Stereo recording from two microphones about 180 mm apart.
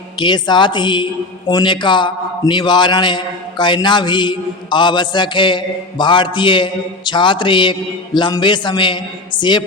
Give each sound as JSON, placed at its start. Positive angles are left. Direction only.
{"t": 0.2, "sound": "a man's voice", "side_deg": 25}